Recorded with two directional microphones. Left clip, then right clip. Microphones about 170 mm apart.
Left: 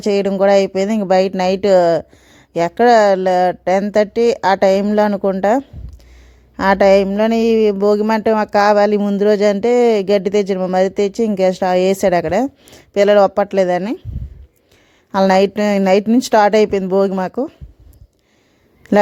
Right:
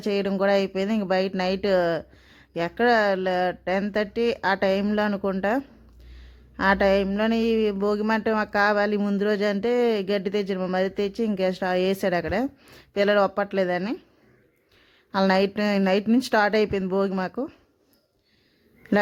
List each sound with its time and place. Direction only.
0.0 s speech: 30° left (ahead or behind)
15.1 s speech: 30° left (ahead or behind)
18.8 s a sound: 35° left (ahead or behind)